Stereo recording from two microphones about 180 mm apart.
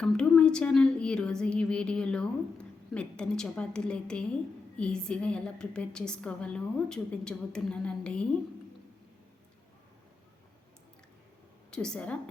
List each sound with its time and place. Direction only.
0.0 s a woman's voice: 5° left (ahead or behind)
11.7 s a woman's voice: 5° left (ahead or behind)